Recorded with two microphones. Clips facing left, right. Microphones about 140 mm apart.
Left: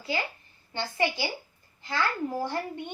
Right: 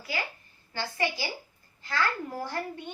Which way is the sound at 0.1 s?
25° left (ahead or behind).